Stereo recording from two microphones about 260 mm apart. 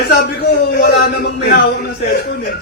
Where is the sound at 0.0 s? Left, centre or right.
Left.